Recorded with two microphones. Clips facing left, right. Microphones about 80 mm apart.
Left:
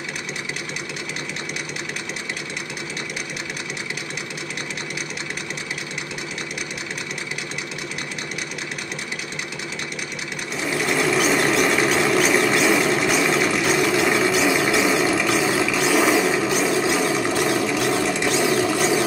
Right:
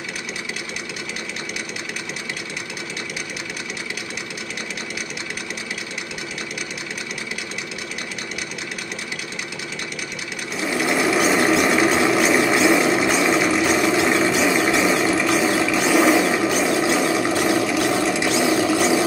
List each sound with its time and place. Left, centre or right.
10.6 s sewing machine: centre
14.3 s a sound: centre
16.7 s vehicle: centre